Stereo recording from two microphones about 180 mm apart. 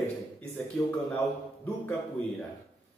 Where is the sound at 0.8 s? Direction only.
20° left (ahead or behind).